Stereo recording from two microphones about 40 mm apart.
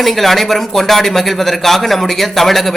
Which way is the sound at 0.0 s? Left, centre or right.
Centre.